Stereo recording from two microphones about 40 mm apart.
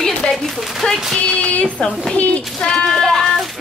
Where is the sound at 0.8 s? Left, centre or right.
Left.